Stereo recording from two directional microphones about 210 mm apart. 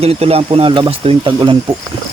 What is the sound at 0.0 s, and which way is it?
Speech, 30° right (ahead or behind).